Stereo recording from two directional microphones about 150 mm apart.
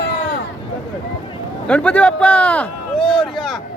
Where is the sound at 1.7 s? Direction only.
10° left (ahead or behind).